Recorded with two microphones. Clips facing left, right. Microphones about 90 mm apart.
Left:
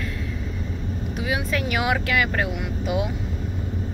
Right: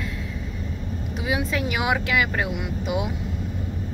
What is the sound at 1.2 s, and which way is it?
Speech, 20° right (ahead or behind).